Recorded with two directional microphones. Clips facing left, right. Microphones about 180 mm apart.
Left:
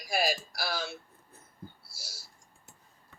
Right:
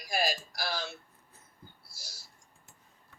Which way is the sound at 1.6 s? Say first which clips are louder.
Left 8 dB; 55° left (ahead or behind).